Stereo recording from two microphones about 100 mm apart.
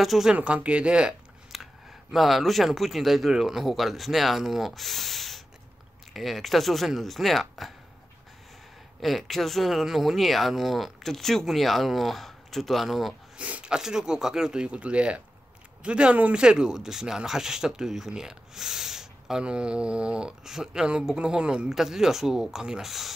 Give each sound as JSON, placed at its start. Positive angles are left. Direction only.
{"t": 0.0, "sound": "speech", "side_deg": -5}
{"t": 9.0, "sound": "speech", "side_deg": 0}
{"t": 13.4, "sound": "speech", "side_deg": -15}